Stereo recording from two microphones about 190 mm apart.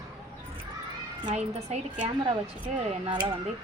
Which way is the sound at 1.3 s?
40° right (ahead or behind).